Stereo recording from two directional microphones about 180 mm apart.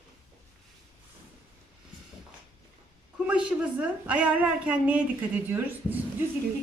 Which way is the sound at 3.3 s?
5° right (ahead or behind).